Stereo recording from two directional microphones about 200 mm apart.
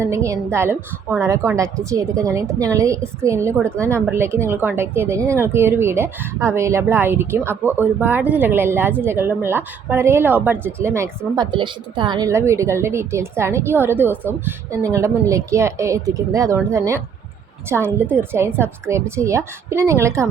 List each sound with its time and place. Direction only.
0.0 s a woman's voice: 15° right (ahead or behind)
11.5 s a woman's voice: 25° right (ahead or behind)